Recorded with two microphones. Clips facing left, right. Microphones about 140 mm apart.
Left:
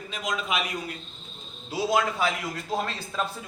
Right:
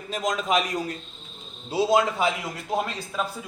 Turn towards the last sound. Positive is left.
turn(degrees=-10)  # may be behind; listen again after turning